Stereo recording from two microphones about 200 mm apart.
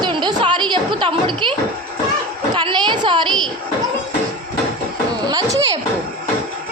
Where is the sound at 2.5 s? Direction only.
25° right (ahead or behind).